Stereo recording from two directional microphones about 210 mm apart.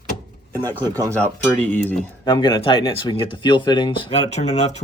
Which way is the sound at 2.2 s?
20° left (ahead or behind).